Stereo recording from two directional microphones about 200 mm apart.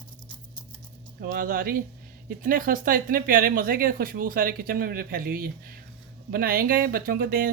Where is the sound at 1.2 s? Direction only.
45° right (ahead or behind).